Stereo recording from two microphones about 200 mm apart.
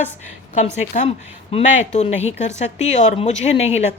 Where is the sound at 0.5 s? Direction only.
35° left (ahead or behind).